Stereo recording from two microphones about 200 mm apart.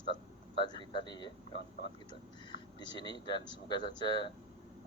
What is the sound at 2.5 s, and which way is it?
A man's voice, 20° left (ahead or behind).